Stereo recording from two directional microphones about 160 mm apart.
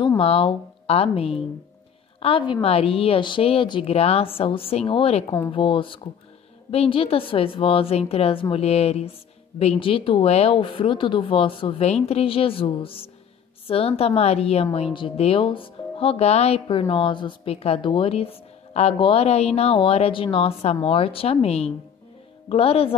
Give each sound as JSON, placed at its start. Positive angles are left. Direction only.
{"t": 0.2, "sound": "a woman's voice", "side_deg": 35}